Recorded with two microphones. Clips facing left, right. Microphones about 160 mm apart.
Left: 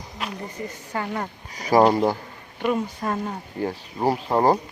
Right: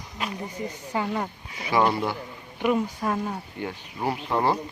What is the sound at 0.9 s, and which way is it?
Speech, 10° right (ahead or behind).